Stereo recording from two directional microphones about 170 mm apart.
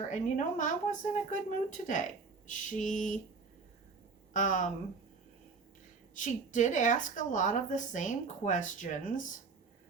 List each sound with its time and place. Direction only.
0.1 s a woman's voice: 45° left (ahead or behind)
4.4 s a woman's voice: 50° left (ahead or behind)
6.1 s a woman's voice: 45° left (ahead or behind)